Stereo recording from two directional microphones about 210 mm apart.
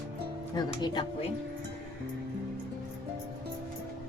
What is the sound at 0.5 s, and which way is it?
Speech, 20° left (ahead or behind).